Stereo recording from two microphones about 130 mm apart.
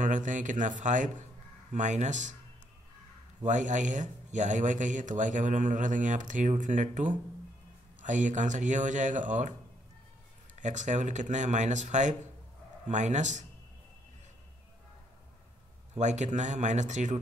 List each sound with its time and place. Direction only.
0.0 s speech: 75° right (ahead or behind)
3.4 s speech: 70° right (ahead or behind)
10.6 s speech: 70° right (ahead or behind)
15.9 s speech: 65° right (ahead or behind)